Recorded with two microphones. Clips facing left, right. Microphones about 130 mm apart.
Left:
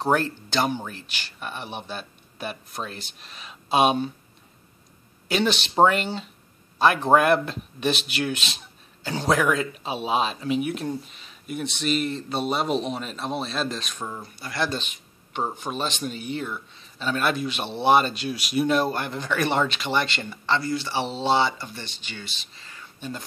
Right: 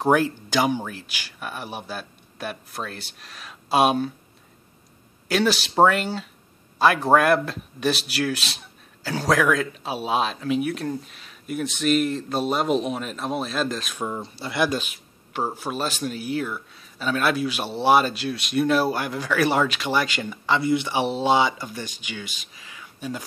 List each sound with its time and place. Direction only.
0.0 s speech: 10° right (ahead or behind)
5.3 s speech: 5° right (ahead or behind)
14.0 s speech: 25° right (ahead or behind)
14.6 s speech: 10° right (ahead or behind)